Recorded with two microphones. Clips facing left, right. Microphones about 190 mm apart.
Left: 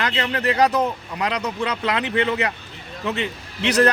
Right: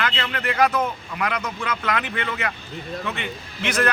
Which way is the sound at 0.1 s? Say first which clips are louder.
Left 4 dB; 20° left (ahead or behind).